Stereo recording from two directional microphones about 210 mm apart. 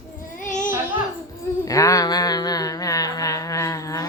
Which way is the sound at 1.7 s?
15° left (ahead or behind).